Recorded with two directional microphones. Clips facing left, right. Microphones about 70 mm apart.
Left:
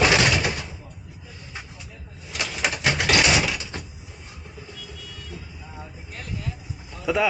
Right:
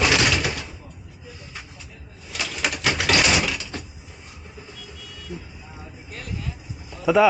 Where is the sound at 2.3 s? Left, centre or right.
Centre.